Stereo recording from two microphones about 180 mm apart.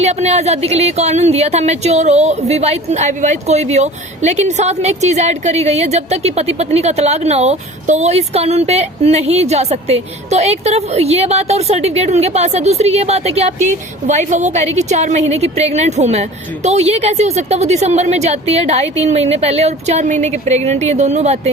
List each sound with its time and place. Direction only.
0.0 s speech: 35° right (ahead or behind)